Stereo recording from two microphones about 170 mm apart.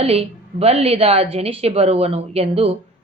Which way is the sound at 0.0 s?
35° right (ahead or behind).